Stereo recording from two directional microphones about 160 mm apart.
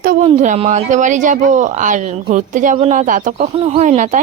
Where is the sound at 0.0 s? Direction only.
60° right (ahead or behind).